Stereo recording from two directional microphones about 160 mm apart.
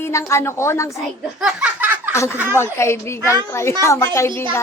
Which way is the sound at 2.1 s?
15° left (ahead or behind).